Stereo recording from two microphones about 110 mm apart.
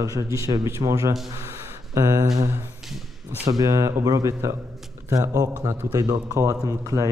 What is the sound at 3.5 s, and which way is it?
Speech, 30° right (ahead or behind).